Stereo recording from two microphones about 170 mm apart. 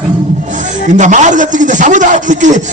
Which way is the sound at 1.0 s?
45° right (ahead or behind).